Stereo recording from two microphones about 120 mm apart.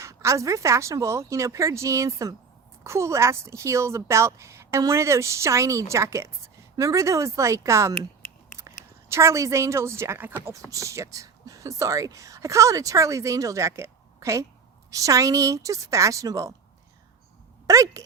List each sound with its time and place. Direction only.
0.0 s speech: 25° right (ahead or behind)
7.9 s a sound: 20° left (ahead or behind)
9.0 s speech: 25° right (ahead or behind)
17.7 s speech: 25° right (ahead or behind)